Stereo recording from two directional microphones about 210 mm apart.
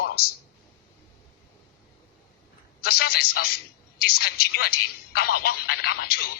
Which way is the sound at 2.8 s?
50° left (ahead or behind).